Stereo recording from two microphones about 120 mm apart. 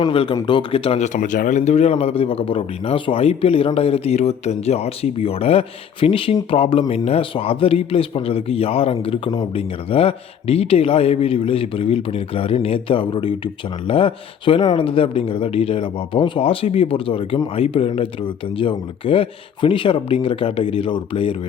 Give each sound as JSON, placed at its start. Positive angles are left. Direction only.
{"t": 0.1, "sound": "speech", "side_deg": 50}